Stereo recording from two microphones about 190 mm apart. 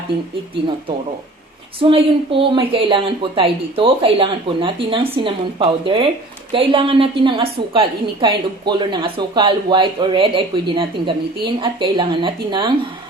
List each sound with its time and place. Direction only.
1.8 s a woman's voice: 30° right (ahead or behind)